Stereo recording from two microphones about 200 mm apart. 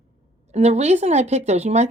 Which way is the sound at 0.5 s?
35° right (ahead or behind).